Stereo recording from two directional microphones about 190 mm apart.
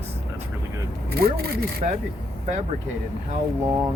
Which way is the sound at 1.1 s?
55° right (ahead or behind).